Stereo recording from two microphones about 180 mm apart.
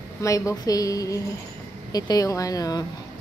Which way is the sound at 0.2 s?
15° left (ahead or behind).